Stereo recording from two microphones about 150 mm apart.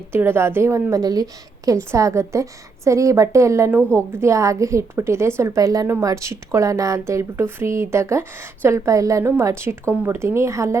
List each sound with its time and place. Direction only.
0.1 s a woman's voice: 15° right (ahead or behind)